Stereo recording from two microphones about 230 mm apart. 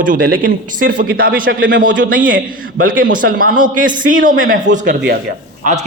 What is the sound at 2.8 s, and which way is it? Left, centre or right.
A man's voice, right.